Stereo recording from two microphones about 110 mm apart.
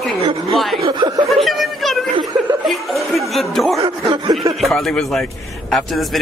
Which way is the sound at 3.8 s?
55° right (ahead or behind).